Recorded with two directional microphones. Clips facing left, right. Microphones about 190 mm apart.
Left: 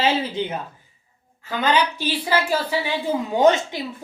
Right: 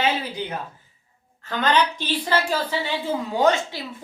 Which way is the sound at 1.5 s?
10° left (ahead or behind).